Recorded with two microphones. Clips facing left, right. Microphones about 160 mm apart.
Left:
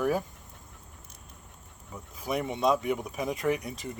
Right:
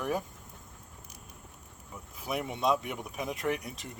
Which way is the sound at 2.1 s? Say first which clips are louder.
Left 4 dB; centre (ahead or behind).